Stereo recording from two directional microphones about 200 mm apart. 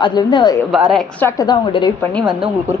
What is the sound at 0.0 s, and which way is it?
Speech, 20° left (ahead or behind).